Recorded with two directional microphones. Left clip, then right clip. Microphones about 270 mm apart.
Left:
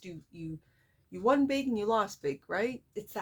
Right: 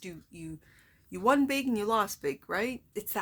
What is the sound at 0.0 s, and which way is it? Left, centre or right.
Speech, right.